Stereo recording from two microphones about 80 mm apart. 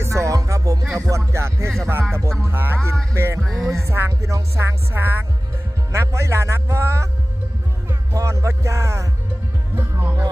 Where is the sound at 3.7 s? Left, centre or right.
Right.